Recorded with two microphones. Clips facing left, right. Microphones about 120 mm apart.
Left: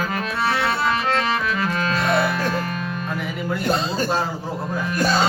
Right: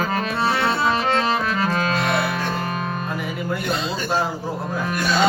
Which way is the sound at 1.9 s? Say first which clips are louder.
Left 1 dB; 40° left (ahead or behind).